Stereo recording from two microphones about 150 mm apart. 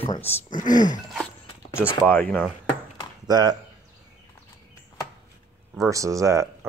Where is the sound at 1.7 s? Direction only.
15° left (ahead or behind).